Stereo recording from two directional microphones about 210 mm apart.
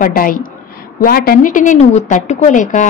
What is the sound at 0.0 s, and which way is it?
A woman's voice, 40° left (ahead or behind).